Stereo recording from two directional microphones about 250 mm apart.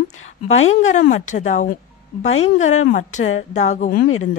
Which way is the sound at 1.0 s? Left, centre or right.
Left.